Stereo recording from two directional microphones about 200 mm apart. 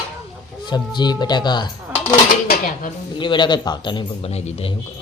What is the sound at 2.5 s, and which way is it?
Dishes, 45° left (ahead or behind).